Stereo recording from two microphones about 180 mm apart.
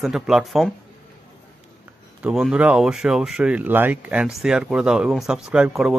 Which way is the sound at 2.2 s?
5° right (ahead or behind).